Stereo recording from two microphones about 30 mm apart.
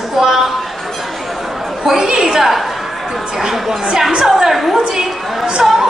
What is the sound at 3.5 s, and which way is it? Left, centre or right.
A woman's voice, centre.